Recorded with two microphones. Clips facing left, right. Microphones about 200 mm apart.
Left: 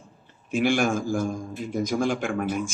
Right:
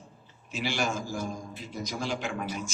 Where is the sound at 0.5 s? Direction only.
55° left (ahead or behind).